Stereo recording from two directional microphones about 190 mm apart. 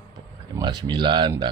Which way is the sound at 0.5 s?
20° right (ahead or behind).